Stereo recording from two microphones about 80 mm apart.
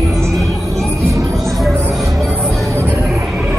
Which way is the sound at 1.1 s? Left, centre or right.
Right.